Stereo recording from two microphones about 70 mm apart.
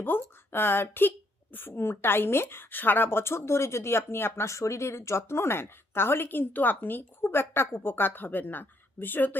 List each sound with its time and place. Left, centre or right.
0.0 s a woman's voice: left
4.4 s a woman's voice: left